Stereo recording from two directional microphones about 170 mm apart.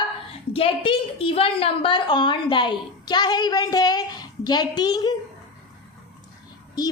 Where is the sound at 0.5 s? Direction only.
35° left (ahead or behind).